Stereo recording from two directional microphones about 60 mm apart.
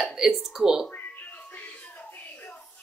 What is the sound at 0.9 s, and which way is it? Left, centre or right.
Music, left.